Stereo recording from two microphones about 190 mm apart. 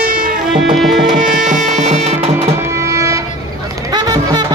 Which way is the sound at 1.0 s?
45° right (ahead or behind).